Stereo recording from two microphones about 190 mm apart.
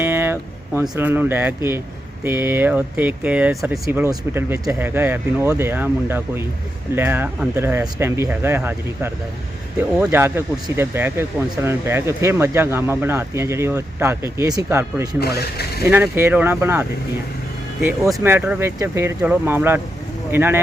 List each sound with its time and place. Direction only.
0.0 s speech: 10° right (ahead or behind)
3.8 s speech: 15° right (ahead or behind)
15.2 s speech: 55° left (ahead or behind)
15.8 s speech: 10° right (ahead or behind)
18.2 s speech: 10° right (ahead or behind)